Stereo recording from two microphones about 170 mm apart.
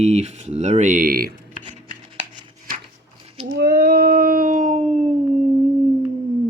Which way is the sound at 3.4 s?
70° right (ahead or behind).